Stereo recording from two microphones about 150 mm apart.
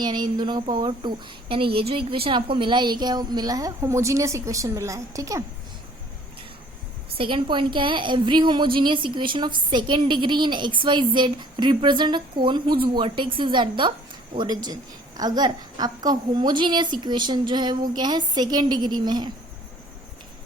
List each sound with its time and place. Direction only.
0.0 s a woman's voice: 30° right (ahead or behind)
7.2 s a woman's voice: 35° right (ahead or behind)